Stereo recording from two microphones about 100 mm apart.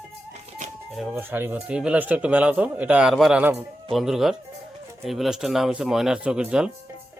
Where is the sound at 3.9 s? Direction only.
5° right (ahead or behind).